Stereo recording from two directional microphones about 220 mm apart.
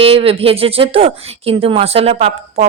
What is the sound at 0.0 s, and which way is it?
Speech, 25° right (ahead or behind).